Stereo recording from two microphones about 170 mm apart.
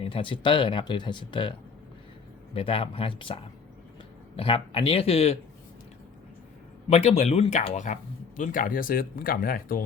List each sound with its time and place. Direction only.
0.0 s speech: 30° left (ahead or behind)
4.4 s speech: 30° left (ahead or behind)
6.9 s speech: 40° left (ahead or behind)
8.4 s speech: 55° left (ahead or behind)